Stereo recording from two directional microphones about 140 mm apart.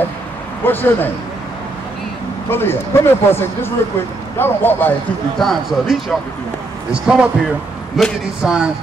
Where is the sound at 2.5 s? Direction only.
15° left (ahead or behind).